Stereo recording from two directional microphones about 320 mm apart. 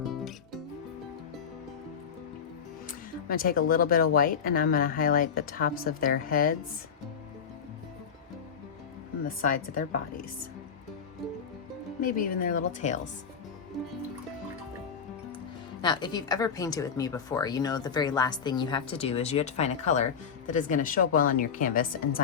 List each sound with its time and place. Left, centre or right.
0.0 s music: centre
2.8 s speech: left
9.2 s speech: left
12.0 s speech: left
15.8 s speech: centre